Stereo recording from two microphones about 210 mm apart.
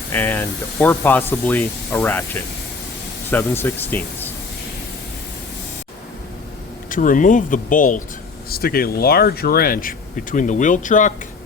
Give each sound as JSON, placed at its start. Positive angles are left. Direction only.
{"t": 0.1, "sound": "speech", "side_deg": 10}
{"t": 6.9, "sound": "speech", "side_deg": 40}